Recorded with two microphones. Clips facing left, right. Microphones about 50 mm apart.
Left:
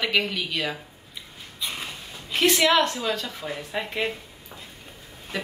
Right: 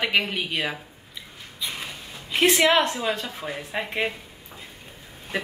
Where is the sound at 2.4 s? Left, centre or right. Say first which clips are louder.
Right 1 dB; right.